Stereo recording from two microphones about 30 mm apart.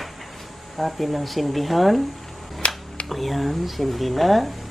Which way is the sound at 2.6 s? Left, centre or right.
Left.